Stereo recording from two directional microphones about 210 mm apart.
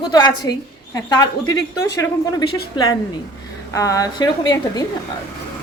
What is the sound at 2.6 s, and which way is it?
A woman's voice, 20° left (ahead or behind).